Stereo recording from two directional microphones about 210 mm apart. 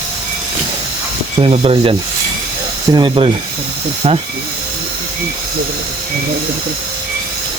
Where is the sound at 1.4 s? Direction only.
25° right (ahead or behind).